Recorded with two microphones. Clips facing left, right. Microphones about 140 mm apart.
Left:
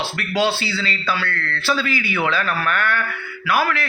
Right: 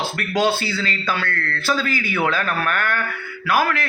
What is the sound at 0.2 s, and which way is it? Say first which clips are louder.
A man's voice: right 1 dB; 45° right (ahead or behind).